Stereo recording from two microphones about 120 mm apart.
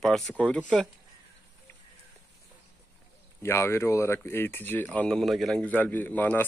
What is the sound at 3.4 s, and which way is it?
Speech, 20° left (ahead or behind).